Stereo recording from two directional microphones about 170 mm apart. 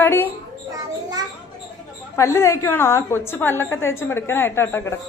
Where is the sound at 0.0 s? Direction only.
10° left (ahead or behind).